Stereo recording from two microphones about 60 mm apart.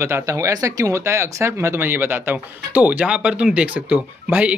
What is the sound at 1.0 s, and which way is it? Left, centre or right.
Speech, right.